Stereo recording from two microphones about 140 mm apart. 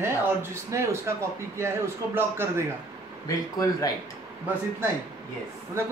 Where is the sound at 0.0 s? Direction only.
20° right (ahead or behind).